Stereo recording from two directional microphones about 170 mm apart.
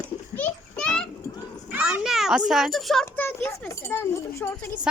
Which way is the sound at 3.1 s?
10° left (ahead or behind).